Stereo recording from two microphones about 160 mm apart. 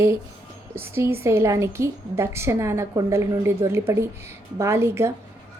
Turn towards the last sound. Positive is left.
turn(degrees=-15)  # may be behind; listen again after turning